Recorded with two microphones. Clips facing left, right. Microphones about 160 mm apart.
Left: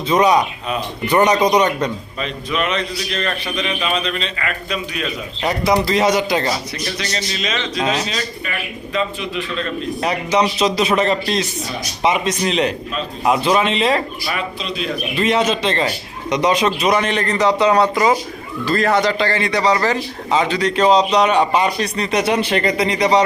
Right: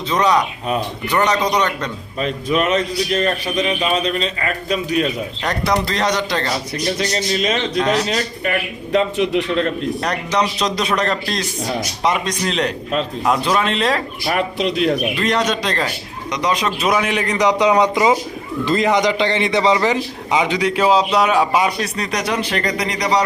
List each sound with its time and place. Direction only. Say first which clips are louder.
0.1 s speech: left 2 dB; 10° left (ahead or behind)
2.1 s a man's voice: right 9 dB; 45° right (ahead or behind)
5.5 s speech: left 3 dB; 5° left (ahead or behind)
7.0 s a man's voice: right 5 dB; 50° right (ahead or behind)
7.8 s speech: right 2 dB; 15° left (ahead or behind)
8.0 s a man's voice: right 4 dB; 60° right (ahead or behind)
10.0 s a man's voice: left 5 dB; 5° left (ahead or behind)
14.3 s a man's voice: right 5 dB; 70° right (ahead or behind)
15.1 s a man's voice: left 2 dB; 5° left (ahead or behind)
16.3 s speech: left 4 dB; 25° left (ahead or behind)
16.6 s a man's voice: left 2 dB; centre (ahead or behind)
22.3 s speech: left 3 dB; 25° left (ahead or behind)